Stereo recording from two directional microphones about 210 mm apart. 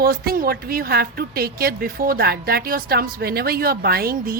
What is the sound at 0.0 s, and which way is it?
A woman's voice, 45° right (ahead or behind).